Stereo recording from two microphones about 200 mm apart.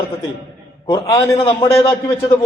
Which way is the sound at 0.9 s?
20° left (ahead or behind).